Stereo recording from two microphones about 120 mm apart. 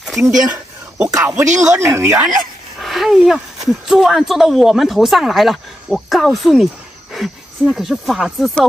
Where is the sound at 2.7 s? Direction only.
Centre (ahead or behind).